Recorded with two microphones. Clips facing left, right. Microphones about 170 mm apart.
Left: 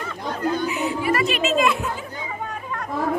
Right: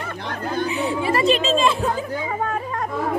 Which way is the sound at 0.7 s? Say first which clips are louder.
Right 1 dB; 30° right (ahead or behind).